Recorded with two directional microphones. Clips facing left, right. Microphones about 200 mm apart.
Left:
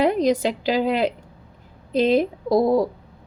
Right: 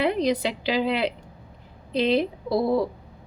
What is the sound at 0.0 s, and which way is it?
A woman's voice, 45° left (ahead or behind).